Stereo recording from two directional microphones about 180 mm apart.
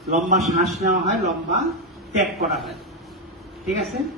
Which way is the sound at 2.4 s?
Centre (ahead or behind).